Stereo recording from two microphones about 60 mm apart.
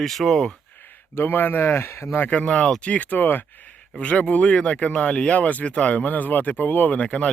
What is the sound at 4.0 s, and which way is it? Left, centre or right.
Speech, left.